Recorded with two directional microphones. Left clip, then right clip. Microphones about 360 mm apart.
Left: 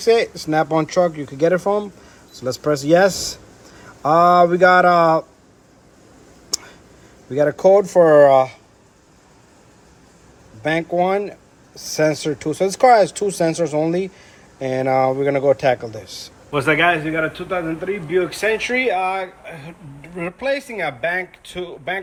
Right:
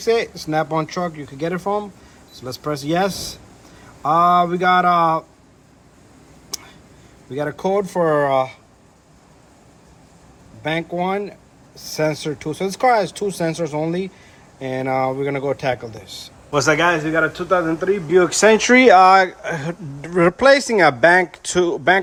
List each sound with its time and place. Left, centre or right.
0.1 s speech: centre
7.3 s speech: centre
10.6 s speech: centre
16.5 s a man's voice: centre
18.8 s speech: right